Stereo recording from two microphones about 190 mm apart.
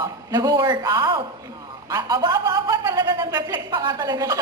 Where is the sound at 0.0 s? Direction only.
20° right (ahead or behind).